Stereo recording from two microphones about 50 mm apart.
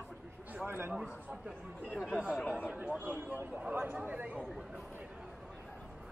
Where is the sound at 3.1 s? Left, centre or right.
Right.